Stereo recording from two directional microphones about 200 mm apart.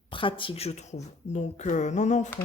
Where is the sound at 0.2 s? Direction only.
25° left (ahead or behind).